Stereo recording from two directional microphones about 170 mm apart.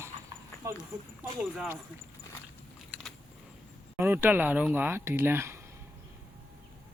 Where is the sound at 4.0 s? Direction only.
15° right (ahead or behind).